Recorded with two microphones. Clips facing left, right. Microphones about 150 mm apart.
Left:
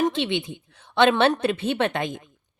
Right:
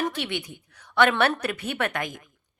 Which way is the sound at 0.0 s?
20° left (ahead or behind).